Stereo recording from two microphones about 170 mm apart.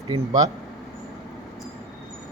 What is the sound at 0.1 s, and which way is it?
Speech, 20° right (ahead or behind).